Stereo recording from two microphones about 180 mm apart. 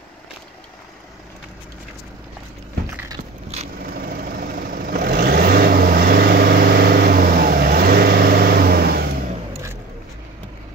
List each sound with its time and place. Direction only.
3.9 s vehicle: 60° right (ahead or behind)